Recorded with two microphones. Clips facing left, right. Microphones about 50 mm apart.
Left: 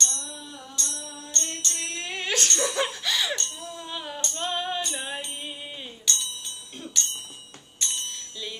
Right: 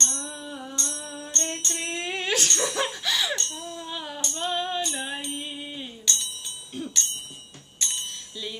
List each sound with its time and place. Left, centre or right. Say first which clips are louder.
0.0 s music: right 1 dB; right
1.7 s music: right 3 dB; centre